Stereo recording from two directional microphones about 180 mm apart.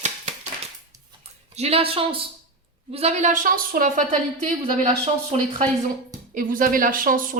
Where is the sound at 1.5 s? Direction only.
35° right (ahead or behind).